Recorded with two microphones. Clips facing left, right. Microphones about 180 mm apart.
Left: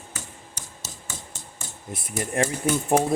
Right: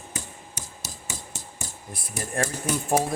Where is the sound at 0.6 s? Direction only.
10° right (ahead or behind).